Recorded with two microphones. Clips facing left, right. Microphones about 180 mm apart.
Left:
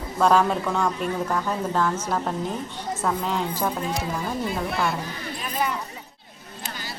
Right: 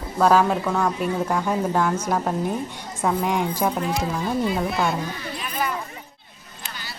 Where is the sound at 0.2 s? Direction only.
5° right (ahead or behind).